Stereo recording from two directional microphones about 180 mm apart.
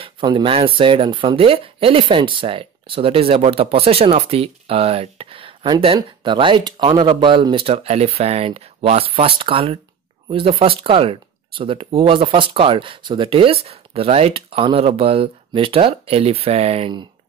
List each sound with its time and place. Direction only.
0.0 s speech: 25° right (ahead or behind)